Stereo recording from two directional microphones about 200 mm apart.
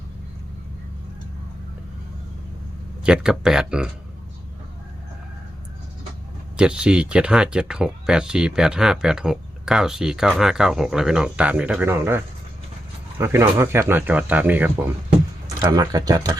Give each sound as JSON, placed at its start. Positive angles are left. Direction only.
{"t": 3.0, "sound": "speech", "side_deg": -5}
{"t": 6.6, "sound": "speech", "side_deg": -5}
{"t": 15.6, "sound": "speech", "side_deg": -20}